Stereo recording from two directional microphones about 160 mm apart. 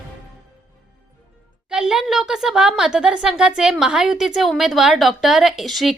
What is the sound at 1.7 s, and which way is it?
A woman's voice, 5° right (ahead or behind).